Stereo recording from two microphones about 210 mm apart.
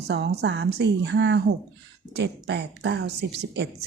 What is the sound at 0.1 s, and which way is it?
A woman's voice, 50° right (ahead or behind).